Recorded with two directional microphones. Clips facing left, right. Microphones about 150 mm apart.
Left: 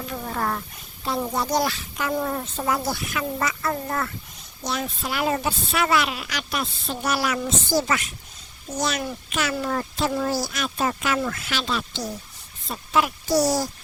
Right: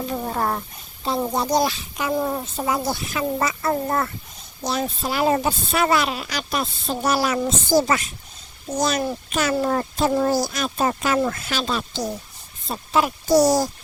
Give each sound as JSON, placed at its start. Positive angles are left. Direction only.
{"t": 0.0, "sound": "roaring cats", "side_deg": -30}
{"t": 1.0, "sound": "speech", "side_deg": -30}
{"t": 1.3, "sound": "speech", "side_deg": -15}